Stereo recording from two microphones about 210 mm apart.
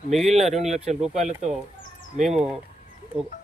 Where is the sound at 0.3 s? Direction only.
30° right (ahead or behind).